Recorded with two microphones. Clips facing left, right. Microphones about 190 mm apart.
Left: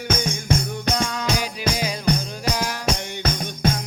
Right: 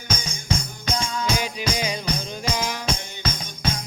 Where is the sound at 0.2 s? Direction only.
60° left (ahead or behind).